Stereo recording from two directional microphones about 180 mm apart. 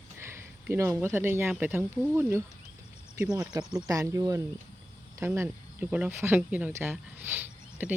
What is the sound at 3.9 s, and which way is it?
Speech, 20° right (ahead or behind).